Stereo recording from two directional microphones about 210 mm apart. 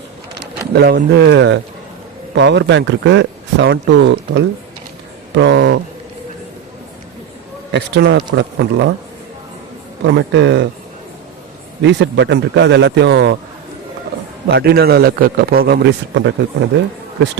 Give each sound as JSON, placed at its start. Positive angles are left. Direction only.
{"t": 0.7, "sound": "a man's voice", "side_deg": -50}
{"t": 7.7, "sound": "speech", "side_deg": -55}
{"t": 10.2, "sound": "speech", "side_deg": -55}
{"t": 11.8, "sound": "speech", "side_deg": -55}
{"t": 14.4, "sound": "a man's voice", "side_deg": -50}